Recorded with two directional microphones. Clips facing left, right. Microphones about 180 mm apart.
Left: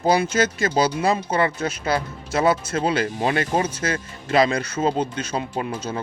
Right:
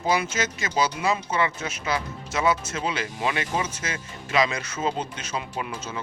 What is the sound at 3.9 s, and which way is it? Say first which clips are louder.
Speech: left 7 dB; 35° left (ahead or behind).